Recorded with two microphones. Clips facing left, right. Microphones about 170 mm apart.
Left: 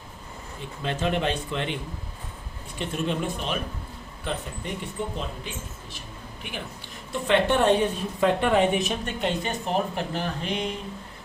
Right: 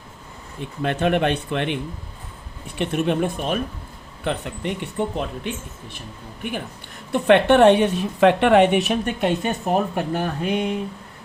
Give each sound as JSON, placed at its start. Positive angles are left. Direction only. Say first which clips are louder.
{"t": 0.6, "sound": "speech", "louder": "right 6 dB", "side_deg": -60}
{"t": 4.2, "sound": "speech", "louder": "right 6 dB", "side_deg": -65}
{"t": 7.1, "sound": "a woman's voice", "louder": "right 7 dB", "side_deg": -65}